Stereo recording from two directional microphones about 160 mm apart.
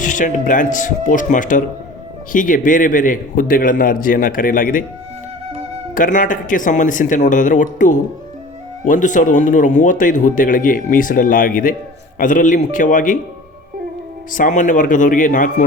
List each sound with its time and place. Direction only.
0.0 s speech: 50° left (ahead or behind)
5.9 s speech: 55° left (ahead or behind)
14.3 s speech: 55° left (ahead or behind)